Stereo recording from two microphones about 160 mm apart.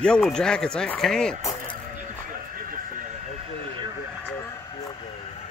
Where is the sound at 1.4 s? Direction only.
20° left (ahead or behind).